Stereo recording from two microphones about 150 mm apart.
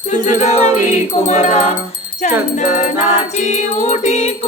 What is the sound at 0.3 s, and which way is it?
Music, 50° left (ahead or behind).